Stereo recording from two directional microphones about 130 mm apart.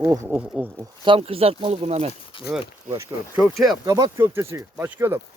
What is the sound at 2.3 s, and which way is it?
Speech, 40° left (ahead or behind).